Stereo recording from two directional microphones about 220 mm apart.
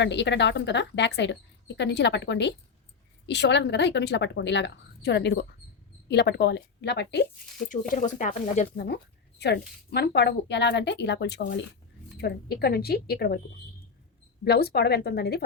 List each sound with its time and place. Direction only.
0.0 s a woman's voice: 50° left (ahead or behind)
7.7 s a woman's voice: 35° left (ahead or behind)
14.4 s a woman's voice: 45° left (ahead or behind)